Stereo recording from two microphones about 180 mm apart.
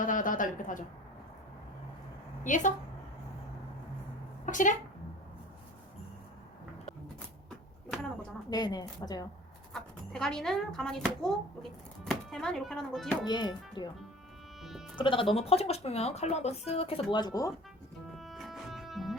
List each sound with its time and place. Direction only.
0.0 s a sound: 50° left (ahead or behind)
2.4 s a woman's voice: 45° left (ahead or behind)
4.4 s speech: 45° left (ahead or behind)
8.4 s a woman's voice: 20° left (ahead or behind)
9.7 s speech: 5° left (ahead or behind)
13.2 s a woman's voice: 25° left (ahead or behind)
14.6 s music: centre (ahead or behind)
14.9 s speech: 30° left (ahead or behind)
18.1 s music: centre (ahead or behind)